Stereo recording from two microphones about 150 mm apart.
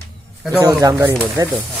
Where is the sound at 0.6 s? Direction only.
25° right (ahead or behind).